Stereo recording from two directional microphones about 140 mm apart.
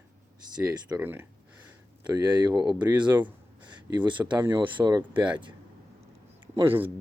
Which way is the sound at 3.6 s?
30° right (ahead or behind).